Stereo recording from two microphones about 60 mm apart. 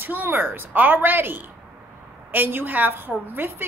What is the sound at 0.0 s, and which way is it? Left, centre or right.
A woman's voice, right.